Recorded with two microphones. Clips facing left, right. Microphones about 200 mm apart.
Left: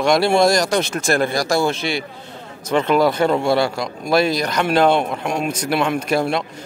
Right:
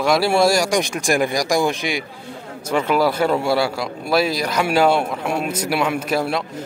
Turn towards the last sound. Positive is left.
turn(degrees=-5)  # may be behind; listen again after turning